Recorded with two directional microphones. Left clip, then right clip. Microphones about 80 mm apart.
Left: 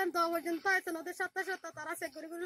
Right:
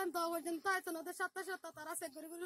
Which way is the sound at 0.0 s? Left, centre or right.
Right.